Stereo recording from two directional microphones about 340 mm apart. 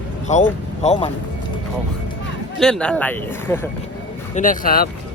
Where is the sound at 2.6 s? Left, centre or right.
Centre.